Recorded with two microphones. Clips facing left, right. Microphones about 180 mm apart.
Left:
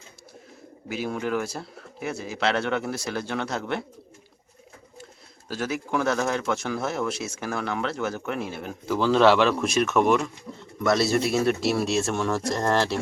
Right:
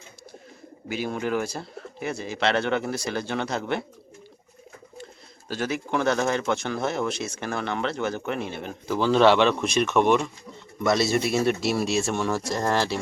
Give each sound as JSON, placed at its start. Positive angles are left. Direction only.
{"t": 0.9, "sound": "speech", "side_deg": 0}
{"t": 5.5, "sound": "speech", "side_deg": 0}